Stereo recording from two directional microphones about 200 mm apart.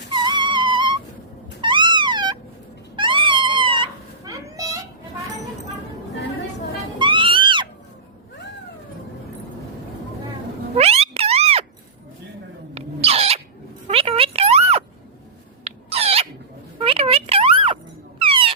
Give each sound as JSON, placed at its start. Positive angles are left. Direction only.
{"t": 0.1, "sound": "a sound", "side_deg": -20}
{"t": 1.6, "sound": "cat", "side_deg": -25}
{"t": 7.0, "sound": "music", "side_deg": -25}
{"t": 10.8, "sound": "music", "side_deg": -30}
{"t": 12.7, "sound": "owl", "side_deg": -30}
{"t": 13.8, "sound": "a sound", "side_deg": -30}
{"t": 15.6, "sound": "rodents", "side_deg": -30}
{"t": 16.7, "sound": "a sound", "side_deg": -30}
{"t": 18.2, "sound": "music", "side_deg": -25}